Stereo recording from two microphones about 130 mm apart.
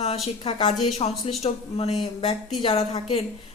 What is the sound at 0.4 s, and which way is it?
Speech, 55° left (ahead or behind).